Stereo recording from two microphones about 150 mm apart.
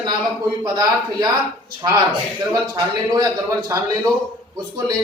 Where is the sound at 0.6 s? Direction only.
25° right (ahead or behind).